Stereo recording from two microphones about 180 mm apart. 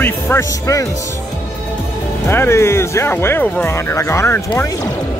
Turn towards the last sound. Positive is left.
turn(degrees=15)  # may be behind; listen again after turning